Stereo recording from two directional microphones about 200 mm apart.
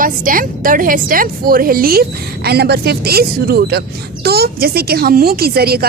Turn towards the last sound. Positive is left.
turn(degrees=-50)  # may be behind; listen again after turning